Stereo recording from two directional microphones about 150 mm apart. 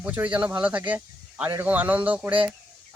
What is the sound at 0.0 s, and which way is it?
Speech, 10° right (ahead or behind).